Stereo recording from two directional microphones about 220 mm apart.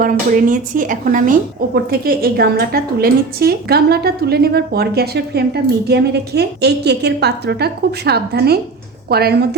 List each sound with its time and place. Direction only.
0.0 s speech: 40° right (ahead or behind)